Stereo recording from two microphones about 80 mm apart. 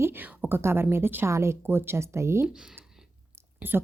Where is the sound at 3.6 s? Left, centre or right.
Right.